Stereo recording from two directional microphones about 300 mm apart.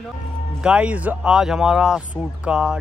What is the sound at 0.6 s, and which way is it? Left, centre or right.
Speech, centre.